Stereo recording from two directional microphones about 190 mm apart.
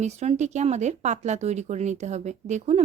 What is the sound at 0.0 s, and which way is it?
Speech, 35° right (ahead or behind).